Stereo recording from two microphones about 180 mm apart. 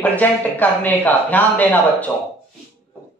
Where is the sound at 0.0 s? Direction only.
10° left (ahead or behind).